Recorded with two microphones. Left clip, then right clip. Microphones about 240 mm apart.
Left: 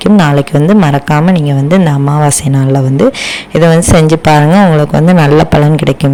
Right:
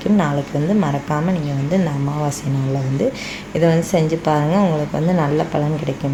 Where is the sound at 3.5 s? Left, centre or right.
Left.